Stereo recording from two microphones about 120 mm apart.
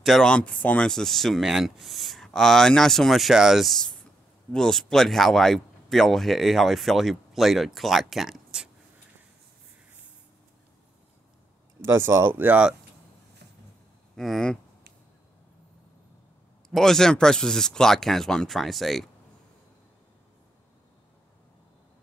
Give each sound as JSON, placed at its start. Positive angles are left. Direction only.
{"t": 0.0, "sound": "speech", "side_deg": 0}
{"t": 11.8, "sound": "speech", "side_deg": -20}
{"t": 14.1, "sound": "speech", "side_deg": 0}
{"t": 16.7, "sound": "speech", "side_deg": 5}